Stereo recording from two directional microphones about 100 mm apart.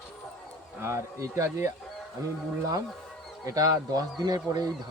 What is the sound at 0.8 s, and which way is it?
Speech, 25° right (ahead or behind).